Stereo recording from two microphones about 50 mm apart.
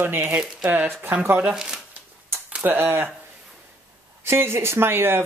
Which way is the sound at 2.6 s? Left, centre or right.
Right.